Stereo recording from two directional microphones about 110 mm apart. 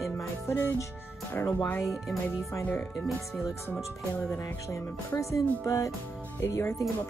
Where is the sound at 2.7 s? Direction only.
15° left (ahead or behind).